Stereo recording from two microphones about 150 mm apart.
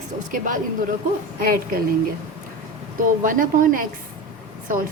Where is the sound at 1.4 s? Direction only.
90° right.